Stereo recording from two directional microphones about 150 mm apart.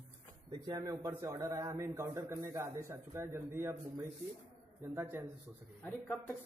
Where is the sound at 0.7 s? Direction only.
25° right (ahead or behind).